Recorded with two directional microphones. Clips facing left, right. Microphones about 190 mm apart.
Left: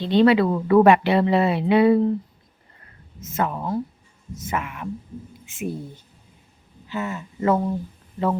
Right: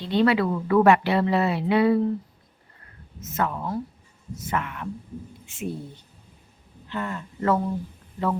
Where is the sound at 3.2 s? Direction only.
25° left (ahead or behind).